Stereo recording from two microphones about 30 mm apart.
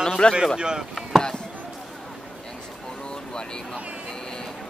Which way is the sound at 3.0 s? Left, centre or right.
Left.